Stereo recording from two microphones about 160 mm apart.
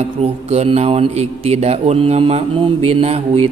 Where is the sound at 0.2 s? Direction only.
40° right (ahead or behind).